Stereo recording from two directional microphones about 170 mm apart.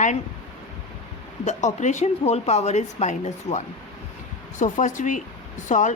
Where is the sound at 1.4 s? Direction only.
45° left (ahead or behind).